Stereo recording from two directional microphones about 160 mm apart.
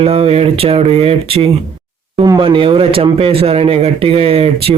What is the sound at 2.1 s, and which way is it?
Speech, 25° right (ahead or behind).